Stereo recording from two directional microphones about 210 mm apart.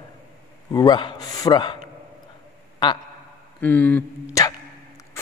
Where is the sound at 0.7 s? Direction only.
20° left (ahead or behind).